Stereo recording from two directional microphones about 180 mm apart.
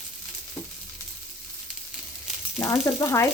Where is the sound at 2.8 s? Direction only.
15° left (ahead or behind).